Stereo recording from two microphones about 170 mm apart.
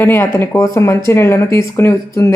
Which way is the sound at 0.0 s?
15° left (ahead or behind).